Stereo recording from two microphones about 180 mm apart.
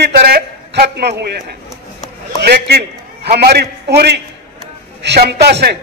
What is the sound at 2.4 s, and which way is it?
A man's voice, 65° right (ahead or behind).